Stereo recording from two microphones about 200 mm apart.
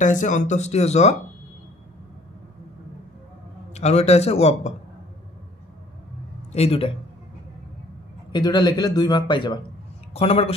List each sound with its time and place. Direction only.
0.0 s speech: 40° left (ahead or behind)
3.7 s speech: 35° left (ahead or behind)
6.5 s a man's voice: 30° left (ahead or behind)
8.3 s a man's voice: 20° left (ahead or behind)